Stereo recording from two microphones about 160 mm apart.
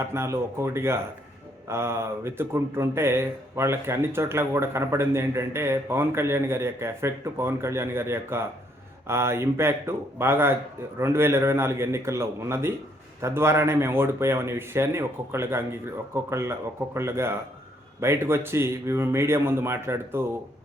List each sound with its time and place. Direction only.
0.0 s speech: 15° right (ahead or behind)